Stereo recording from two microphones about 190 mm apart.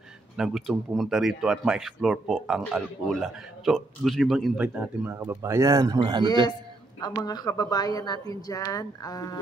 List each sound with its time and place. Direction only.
0.4 s speech: centre (ahead or behind); by 6.2 s 20° right (ahead or behind)
7.2 s speech: 20° left (ahead or behind)